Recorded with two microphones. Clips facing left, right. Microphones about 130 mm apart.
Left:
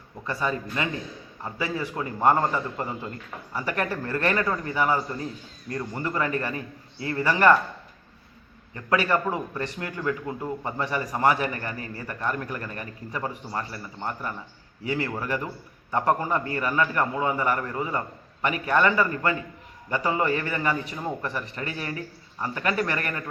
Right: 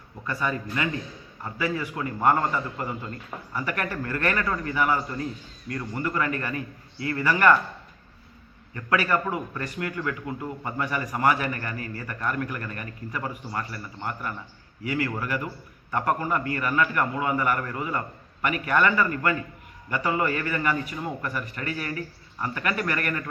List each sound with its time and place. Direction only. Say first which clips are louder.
0.3 s a man's voice: left 1 dB; 30° left (ahead or behind)
8.7 s a man's voice: left 1 dB; 25° left (ahead or behind)